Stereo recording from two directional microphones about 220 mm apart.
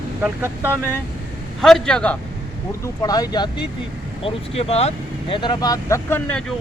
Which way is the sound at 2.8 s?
15° left (ahead or behind).